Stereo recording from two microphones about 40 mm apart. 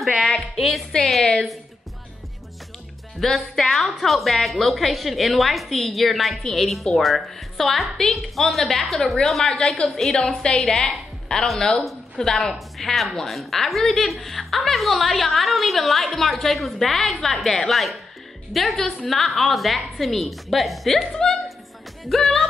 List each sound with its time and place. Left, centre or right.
0.4 s a woman's voice: centre
3.2 s a woman's voice: centre
11.3 s speech: left
12.2 s a woman's voice: centre
22.1 s a woman's voice: centre